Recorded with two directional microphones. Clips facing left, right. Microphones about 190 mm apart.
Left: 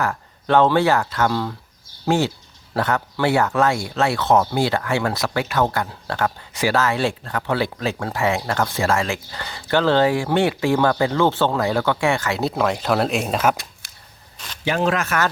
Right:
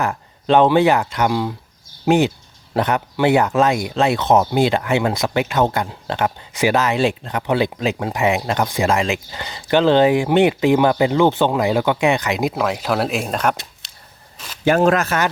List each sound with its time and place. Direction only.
0.0 s speech: 20° right (ahead or behind)
12.5 s speech: 5° right (ahead or behind)
14.6 s speech: 50° right (ahead or behind)